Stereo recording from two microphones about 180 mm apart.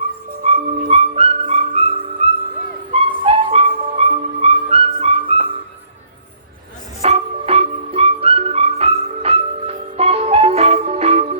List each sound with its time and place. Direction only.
0.4 s music: 35° right (ahead or behind)
7.0 s music: 35° right (ahead or behind)